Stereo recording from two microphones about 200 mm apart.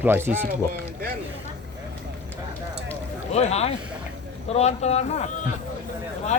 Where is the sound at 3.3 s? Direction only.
30° left (ahead or behind).